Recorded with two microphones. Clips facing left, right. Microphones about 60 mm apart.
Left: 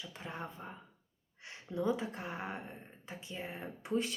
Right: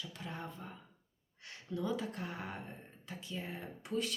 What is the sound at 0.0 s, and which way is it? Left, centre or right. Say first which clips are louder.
Speech: left 1 dB; left.